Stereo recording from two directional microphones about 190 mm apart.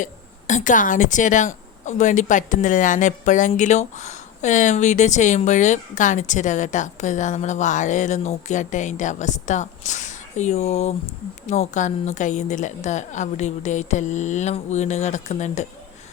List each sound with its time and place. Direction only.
0.0 s a woman's voice: 40° left (ahead or behind)